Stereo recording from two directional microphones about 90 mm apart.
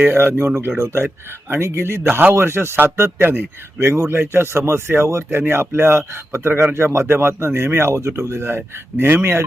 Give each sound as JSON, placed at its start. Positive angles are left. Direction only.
{"t": 0.0, "sound": "a man's voice", "side_deg": -25}